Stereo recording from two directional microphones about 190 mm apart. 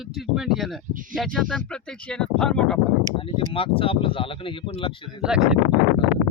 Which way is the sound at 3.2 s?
30° left (ahead or behind).